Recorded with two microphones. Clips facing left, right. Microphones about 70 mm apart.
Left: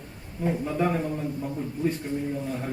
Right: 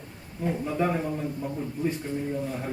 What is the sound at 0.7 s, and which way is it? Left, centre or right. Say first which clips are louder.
Speech: right 1 dB; centre.